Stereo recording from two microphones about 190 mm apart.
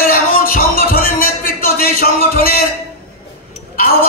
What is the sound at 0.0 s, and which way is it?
Music, 50° left (ahead or behind).